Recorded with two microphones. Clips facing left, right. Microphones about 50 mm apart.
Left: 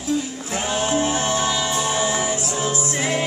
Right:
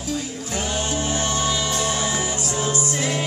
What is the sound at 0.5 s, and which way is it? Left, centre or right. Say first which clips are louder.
Music: left 4 dB; centre.